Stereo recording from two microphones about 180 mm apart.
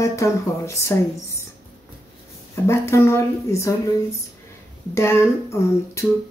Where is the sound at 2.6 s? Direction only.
15° left (ahead or behind).